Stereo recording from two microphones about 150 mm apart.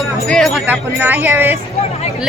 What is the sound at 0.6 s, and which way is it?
Speech, 15° right (ahead or behind).